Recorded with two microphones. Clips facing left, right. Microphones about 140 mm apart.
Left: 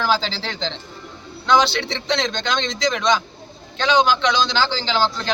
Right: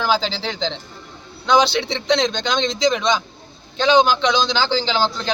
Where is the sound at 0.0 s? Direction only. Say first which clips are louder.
Right 1 dB; 15° right (ahead or behind).